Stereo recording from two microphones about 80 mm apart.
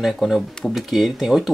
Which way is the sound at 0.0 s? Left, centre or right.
Centre.